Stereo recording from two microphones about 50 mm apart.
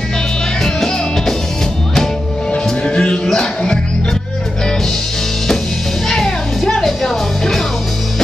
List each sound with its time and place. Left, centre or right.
0.6 s music: centre
2.6 s music: centre
6.0 s music: centre